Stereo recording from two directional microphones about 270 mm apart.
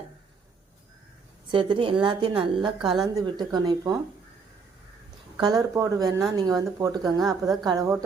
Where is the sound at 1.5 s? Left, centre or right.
Centre.